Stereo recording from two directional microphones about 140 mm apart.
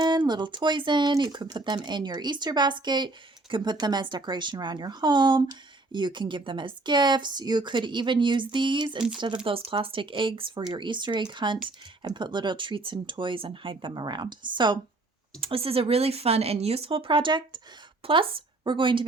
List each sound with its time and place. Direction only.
0.0 s speech: 30° right (ahead or behind)